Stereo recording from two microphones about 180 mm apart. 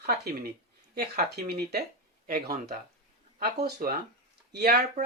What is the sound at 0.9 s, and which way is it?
Speech, 60° right (ahead or behind).